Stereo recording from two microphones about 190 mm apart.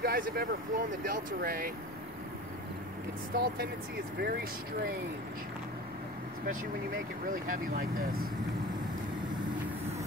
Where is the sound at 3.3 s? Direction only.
55° right (ahead or behind).